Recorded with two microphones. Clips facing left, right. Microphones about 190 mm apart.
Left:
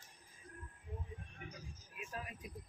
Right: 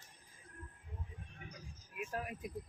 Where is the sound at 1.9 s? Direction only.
55° right (ahead or behind).